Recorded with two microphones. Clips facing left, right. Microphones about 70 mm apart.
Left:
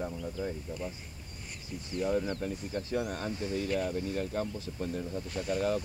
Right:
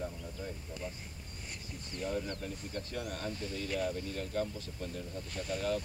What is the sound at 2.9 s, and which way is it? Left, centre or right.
Speech, left.